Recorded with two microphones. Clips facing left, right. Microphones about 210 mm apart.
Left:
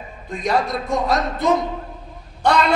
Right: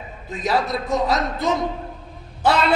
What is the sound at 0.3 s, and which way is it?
A man's voice, 5° right (ahead or behind).